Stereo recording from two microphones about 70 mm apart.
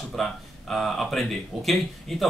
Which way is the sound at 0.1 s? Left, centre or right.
Centre.